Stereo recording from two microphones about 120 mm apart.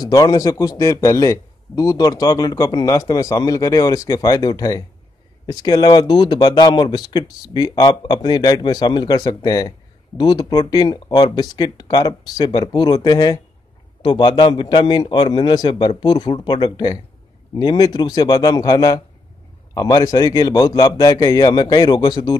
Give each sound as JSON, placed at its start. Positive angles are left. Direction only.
{"t": 0.0, "sound": "speech", "side_deg": 30}